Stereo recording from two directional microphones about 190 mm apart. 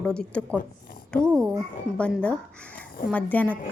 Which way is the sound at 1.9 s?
5° left (ahead or behind).